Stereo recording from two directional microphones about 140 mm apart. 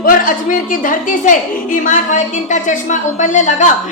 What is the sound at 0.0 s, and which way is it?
A woman's voice, 80° left.